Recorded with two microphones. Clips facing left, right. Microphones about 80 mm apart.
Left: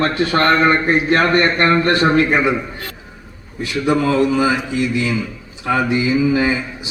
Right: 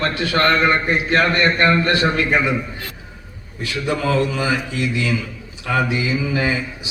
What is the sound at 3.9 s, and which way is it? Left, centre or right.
Speech, left.